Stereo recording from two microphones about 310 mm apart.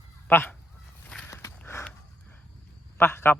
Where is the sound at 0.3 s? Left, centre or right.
Centre.